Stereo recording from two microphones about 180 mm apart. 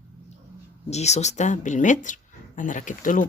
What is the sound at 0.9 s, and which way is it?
Speech, 40° left (ahead or behind).